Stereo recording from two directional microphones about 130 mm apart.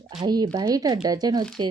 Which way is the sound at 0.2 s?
30° right (ahead or behind).